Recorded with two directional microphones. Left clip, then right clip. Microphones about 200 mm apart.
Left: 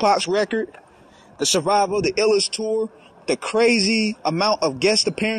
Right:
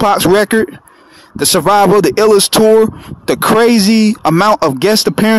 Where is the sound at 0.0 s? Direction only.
40° right (ahead or behind).